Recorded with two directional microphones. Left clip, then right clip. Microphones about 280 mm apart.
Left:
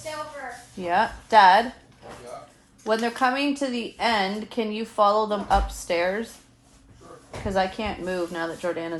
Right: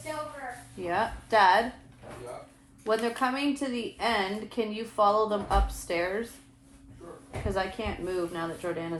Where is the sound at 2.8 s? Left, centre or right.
Left.